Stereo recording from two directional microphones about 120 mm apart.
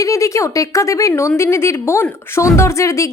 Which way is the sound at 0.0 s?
25° left (ahead or behind).